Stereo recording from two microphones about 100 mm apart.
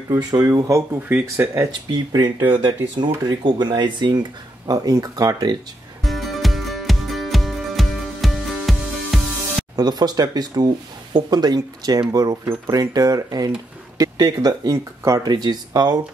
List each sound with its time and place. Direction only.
0.3 s speech: 40° right (ahead or behind)
2.1 s speech: 50° right (ahead or behind)
6.0 s music: centre (ahead or behind)
9.8 s speech: 45° right (ahead or behind)